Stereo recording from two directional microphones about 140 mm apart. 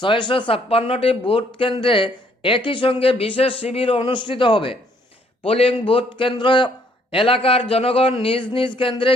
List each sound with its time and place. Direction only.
0.0 s a man's voice: 35° left (ahead or behind)